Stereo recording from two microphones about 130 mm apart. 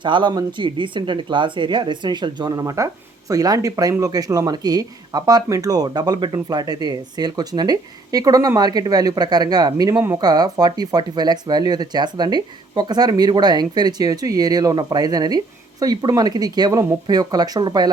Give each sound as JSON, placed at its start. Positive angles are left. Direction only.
{"t": 0.0, "sound": "a woman's voice", "side_deg": -35}